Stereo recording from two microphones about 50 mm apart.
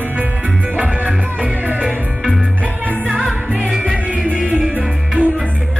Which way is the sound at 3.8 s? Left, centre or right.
Right.